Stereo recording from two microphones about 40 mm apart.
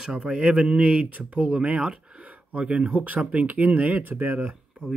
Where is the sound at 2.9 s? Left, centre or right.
Right.